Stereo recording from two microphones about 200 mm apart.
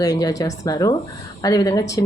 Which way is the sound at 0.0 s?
20° left (ahead or behind).